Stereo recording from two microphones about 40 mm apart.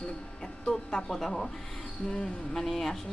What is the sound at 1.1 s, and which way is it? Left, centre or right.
Speech, centre.